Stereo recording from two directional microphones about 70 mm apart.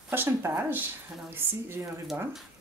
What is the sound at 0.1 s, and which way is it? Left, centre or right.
Speech, right.